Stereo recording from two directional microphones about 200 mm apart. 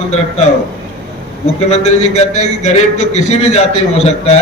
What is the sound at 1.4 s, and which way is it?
A man's voice, 35° left (ahead or behind).